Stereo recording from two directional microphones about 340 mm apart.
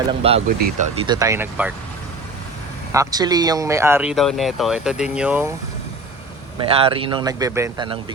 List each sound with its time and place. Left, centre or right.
0.2 s speech: centre
2.9 s speech: centre
6.6 s speech: centre